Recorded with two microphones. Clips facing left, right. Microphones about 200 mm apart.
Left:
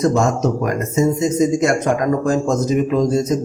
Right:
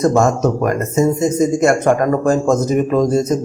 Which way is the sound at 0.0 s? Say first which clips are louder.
Right 2 dB; 50° right (ahead or behind).